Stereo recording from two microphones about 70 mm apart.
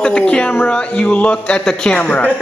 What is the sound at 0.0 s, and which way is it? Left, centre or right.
Speech, centre.